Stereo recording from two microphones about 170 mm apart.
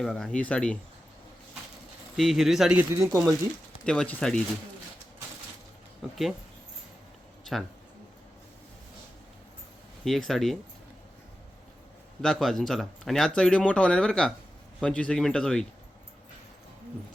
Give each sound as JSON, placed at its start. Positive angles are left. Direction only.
{"t": 0.0, "sound": "speech", "side_deg": 5}
{"t": 2.1, "sound": "speech", "side_deg": 0}
{"t": 3.8, "sound": "speech", "side_deg": 5}
{"t": 10.0, "sound": "speech", "side_deg": 0}
{"t": 12.2, "sound": "speech", "side_deg": 0}